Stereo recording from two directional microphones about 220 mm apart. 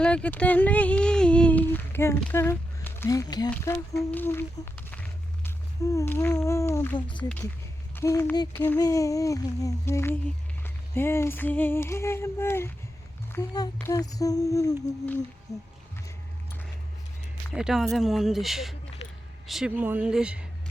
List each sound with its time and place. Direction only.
0.0 s speech: 5° left (ahead or behind)
17.5 s speech: centre (ahead or behind)